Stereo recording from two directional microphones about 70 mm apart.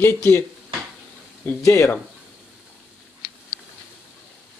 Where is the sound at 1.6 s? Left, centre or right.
Left.